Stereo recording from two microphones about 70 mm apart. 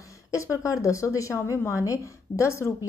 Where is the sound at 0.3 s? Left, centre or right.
Left.